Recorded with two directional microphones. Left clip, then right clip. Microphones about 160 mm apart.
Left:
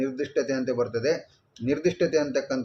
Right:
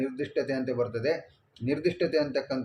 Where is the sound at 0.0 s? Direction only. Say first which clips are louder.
Left 3 dB; 20° left (ahead or behind).